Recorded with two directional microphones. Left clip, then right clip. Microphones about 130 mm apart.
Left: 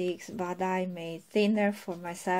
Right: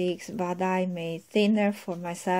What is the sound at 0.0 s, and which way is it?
Speech, 25° right (ahead or behind).